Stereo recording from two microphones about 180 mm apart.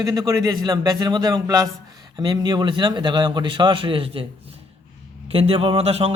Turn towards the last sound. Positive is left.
turn(degrees=-35)  # may be behind; listen again after turning